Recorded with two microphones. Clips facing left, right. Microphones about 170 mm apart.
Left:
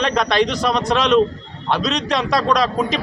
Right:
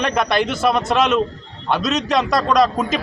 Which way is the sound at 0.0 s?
5° right (ahead or behind).